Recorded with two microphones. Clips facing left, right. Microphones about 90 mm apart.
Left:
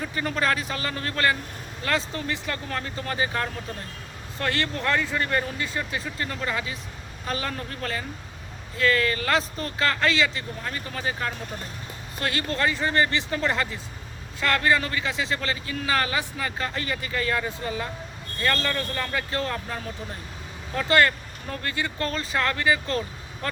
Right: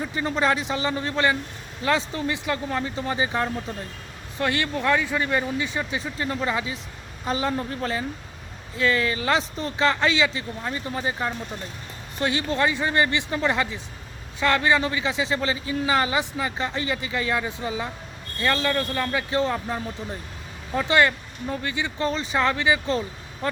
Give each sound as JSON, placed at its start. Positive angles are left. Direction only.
{"t": 0.0, "sound": "a man's voice", "side_deg": -20}